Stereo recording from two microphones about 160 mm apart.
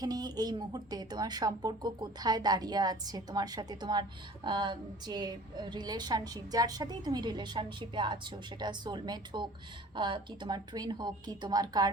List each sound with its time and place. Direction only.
0.0 s a woman's voice: 25° right (ahead or behind)